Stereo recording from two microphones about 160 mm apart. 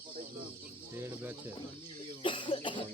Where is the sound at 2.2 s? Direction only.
30° left (ahead or behind).